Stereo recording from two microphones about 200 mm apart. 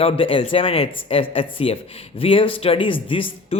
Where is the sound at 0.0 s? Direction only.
25° left (ahead or behind).